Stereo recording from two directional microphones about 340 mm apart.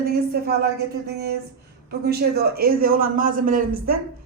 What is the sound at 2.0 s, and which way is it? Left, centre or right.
A woman's voice, right.